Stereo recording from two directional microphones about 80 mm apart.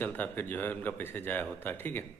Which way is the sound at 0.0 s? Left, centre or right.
Left.